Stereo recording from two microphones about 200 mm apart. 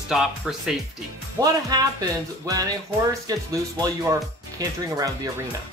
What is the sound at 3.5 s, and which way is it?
Speech, 15° right (ahead or behind).